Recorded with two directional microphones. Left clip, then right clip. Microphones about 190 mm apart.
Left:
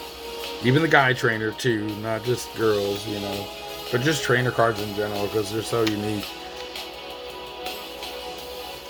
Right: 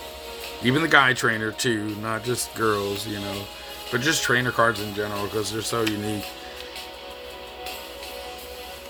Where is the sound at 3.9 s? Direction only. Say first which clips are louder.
Even; 10° right (ahead or behind).